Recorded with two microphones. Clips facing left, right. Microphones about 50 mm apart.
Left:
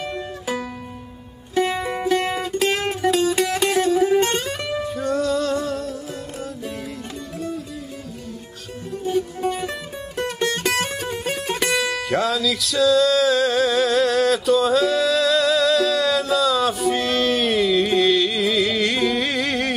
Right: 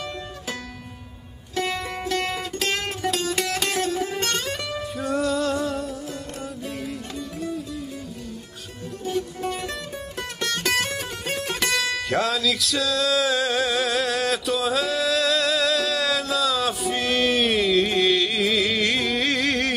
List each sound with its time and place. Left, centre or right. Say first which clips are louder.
1.5 s music: left 6 dB; left; by 5.9 s centre
9.0 s music: left 5 dB; centre
10.2 s music: left 6 dB; left
11.0 s music: left 3 dB; centre